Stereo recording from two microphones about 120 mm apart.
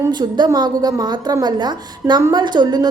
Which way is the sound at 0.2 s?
40° right (ahead or behind).